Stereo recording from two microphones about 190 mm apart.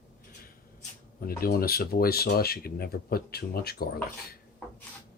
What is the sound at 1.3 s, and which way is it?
Speech, 50° left (ahead or behind).